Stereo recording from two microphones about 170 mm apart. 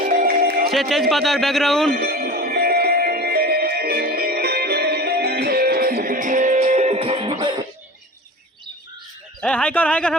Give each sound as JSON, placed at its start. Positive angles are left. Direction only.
{"t": 0.0, "sound": "music", "side_deg": -60}
{"t": 0.7, "sound": "a man's voice", "side_deg": 0}
{"t": 1.9, "sound": "music", "side_deg": -60}
{"t": 9.4, "sound": "speech", "side_deg": 5}